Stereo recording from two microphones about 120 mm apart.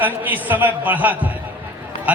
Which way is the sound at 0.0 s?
15° right (ahead or behind).